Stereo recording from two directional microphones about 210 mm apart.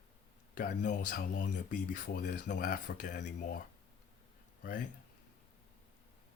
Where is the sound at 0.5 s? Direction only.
35° left (ahead or behind).